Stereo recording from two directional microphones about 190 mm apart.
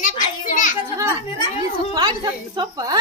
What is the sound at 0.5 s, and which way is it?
Children playing, 45° left (ahead or behind).